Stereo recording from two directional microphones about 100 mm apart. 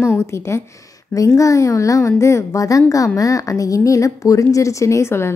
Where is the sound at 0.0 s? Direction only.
25° left (ahead or behind).